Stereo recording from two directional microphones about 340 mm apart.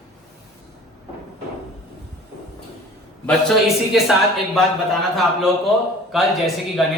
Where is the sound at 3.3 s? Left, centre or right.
Centre.